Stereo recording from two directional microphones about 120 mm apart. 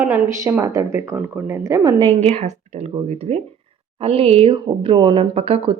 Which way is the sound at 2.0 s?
55° right (ahead or behind).